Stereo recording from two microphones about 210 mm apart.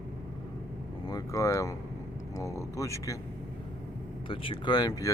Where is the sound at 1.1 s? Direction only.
15° left (ahead or behind).